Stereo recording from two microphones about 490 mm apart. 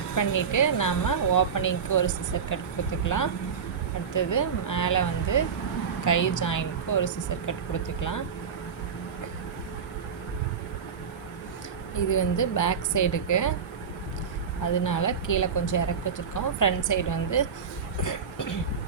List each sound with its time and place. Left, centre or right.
0.2 s speech: left
11.9 s speech: left
14.6 s speech: left